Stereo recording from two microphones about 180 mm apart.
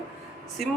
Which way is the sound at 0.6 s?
Centre (ahead or behind).